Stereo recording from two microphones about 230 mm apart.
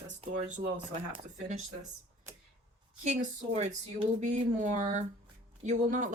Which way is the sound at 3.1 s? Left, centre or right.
Right.